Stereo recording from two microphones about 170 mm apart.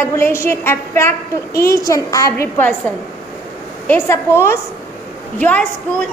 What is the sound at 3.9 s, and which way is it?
A woman's voice, 15° left (ahead or behind).